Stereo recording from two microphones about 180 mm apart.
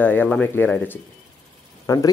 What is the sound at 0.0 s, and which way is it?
Speech, 10° left (ahead or behind).